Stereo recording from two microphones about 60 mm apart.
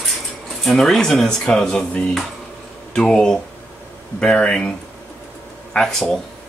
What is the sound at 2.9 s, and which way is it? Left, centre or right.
Speech, centre.